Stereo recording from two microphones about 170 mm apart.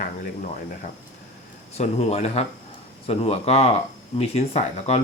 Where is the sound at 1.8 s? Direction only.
40° left (ahead or behind).